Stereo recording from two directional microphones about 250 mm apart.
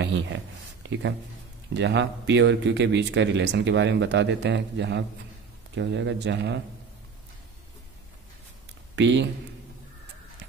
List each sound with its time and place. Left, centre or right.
0.0 s a sound: right
1.7 s a man's voice: right
8.9 s speech: right